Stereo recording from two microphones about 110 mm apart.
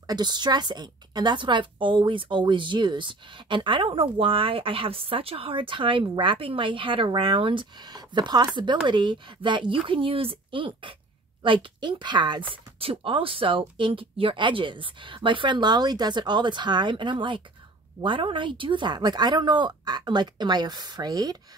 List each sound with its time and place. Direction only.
0.0 s a woman's voice: 40° right (ahead or behind)